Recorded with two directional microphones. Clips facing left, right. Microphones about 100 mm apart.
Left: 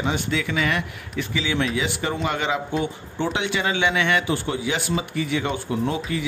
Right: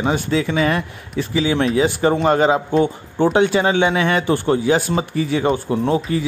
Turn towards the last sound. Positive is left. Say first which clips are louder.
# right 6 dB
turn(degrees=-35)  # may be behind; listen again after turning